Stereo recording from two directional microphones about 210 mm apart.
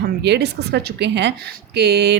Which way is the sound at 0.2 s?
55° right (ahead or behind).